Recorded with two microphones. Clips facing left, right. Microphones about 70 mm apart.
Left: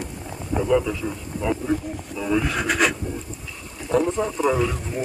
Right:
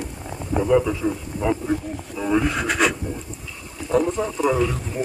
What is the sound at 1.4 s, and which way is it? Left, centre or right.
Speech, right.